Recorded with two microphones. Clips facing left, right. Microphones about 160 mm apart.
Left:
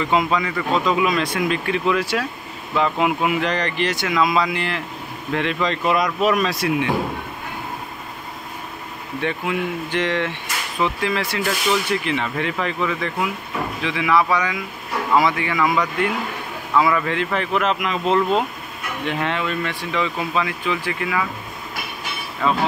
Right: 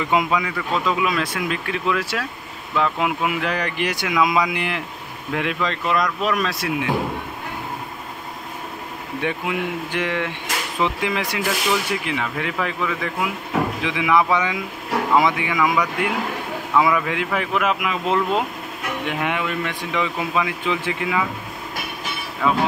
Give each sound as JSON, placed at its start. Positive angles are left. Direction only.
{"t": 0.0, "sound": "speech", "side_deg": -10}
{"t": 9.2, "sound": "speech", "side_deg": -10}
{"t": 13.8, "sound": "speech", "side_deg": -15}
{"t": 22.4, "sound": "speech", "side_deg": -5}